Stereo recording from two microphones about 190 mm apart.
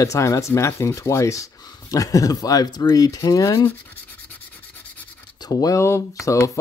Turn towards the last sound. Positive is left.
turn(degrees=15)  # may be behind; listen again after turning